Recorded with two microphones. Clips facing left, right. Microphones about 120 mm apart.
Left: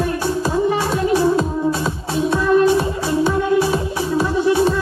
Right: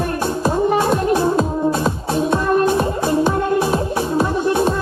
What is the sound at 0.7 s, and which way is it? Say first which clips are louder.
Music: right 2 dB; 50° right (ahead or behind).